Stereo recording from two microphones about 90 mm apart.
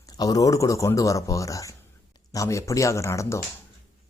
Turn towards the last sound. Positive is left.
turn(degrees=30)  # may be behind; listen again after turning